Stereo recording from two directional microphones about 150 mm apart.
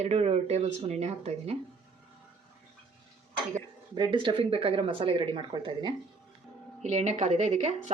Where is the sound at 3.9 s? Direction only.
35° right (ahead or behind).